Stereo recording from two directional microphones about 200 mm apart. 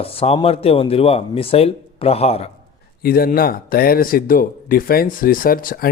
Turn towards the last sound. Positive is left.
turn(degrees=45)  # may be behind; listen again after turning